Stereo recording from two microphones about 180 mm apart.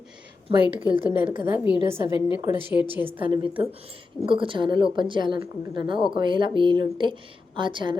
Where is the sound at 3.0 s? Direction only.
30° right (ahead or behind).